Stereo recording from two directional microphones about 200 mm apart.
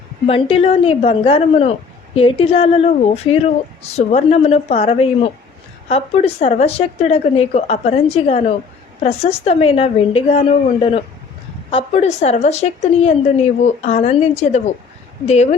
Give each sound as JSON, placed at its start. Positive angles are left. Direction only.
{"t": 0.3, "sound": "speech", "side_deg": 30}